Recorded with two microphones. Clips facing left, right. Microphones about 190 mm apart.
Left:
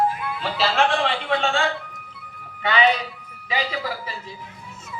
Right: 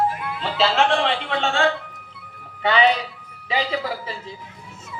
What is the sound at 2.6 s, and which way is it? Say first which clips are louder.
Speech: right 2 dB; 35° right (ahead or behind).